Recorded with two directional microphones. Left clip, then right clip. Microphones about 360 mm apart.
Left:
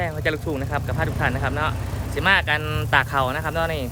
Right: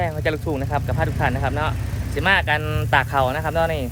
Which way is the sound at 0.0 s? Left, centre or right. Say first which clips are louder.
Right 1 dB; centre.